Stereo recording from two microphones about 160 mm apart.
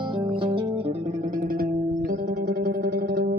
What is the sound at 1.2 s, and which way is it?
Music, 55° right (ahead or behind).